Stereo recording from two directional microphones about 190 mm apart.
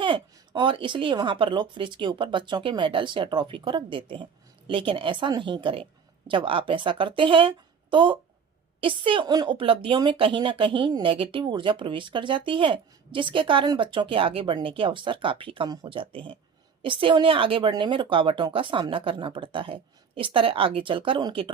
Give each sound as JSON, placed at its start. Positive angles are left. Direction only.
{"t": 0.0, "sound": "a woman's voice", "side_deg": -25}